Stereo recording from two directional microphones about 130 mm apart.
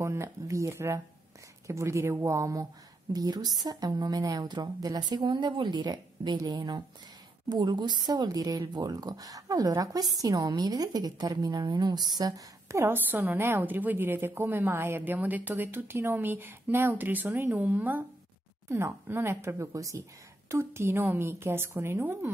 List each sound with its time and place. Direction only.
0.0 s a woman's voice: 20° right (ahead or behind)